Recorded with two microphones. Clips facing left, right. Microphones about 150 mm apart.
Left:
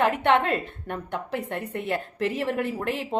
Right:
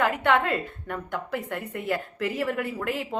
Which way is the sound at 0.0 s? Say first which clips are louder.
Left 2 dB; 25° left (ahead or behind).